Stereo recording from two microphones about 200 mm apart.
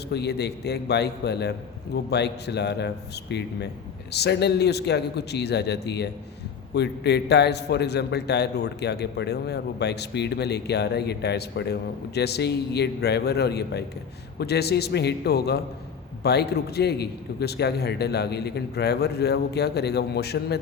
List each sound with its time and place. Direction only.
0.1 s a man's voice: 55° left (ahead or behind)